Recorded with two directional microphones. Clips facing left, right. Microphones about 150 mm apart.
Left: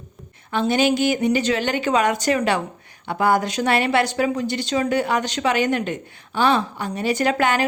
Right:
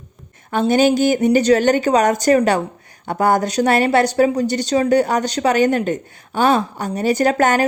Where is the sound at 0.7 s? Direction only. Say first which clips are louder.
Right 5 dB; 45° right (ahead or behind).